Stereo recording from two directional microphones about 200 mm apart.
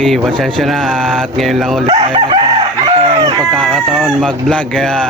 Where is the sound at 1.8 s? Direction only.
25° right (ahead or behind).